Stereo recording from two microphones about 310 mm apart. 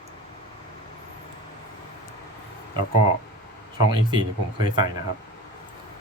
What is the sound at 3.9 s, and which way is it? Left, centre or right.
Speech, centre.